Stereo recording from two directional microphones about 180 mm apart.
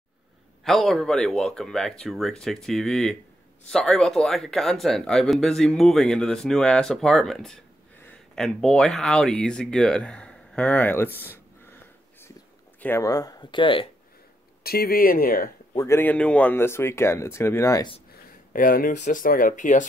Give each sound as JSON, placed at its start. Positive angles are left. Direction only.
{"t": 0.7, "sound": "speech", "side_deg": 0}
{"t": 14.6, "sound": "speech", "side_deg": 55}
{"t": 15.7, "sound": "speech", "side_deg": 15}
{"t": 18.1, "sound": "speech", "side_deg": 50}